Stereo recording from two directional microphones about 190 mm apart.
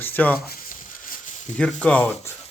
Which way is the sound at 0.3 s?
50° left (ahead or behind).